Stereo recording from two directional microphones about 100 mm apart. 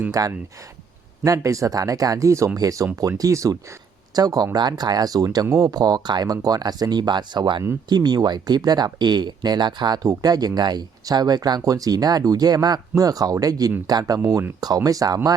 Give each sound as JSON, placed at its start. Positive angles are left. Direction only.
{"t": 0.1, "sound": "speech", "side_deg": -35}